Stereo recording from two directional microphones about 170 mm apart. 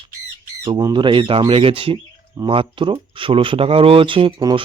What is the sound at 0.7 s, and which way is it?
Speech, 25° right (ahead or behind).